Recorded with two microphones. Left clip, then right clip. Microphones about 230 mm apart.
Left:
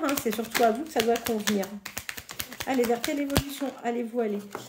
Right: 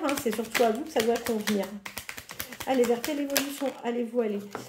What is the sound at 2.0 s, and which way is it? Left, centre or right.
Typing, centre.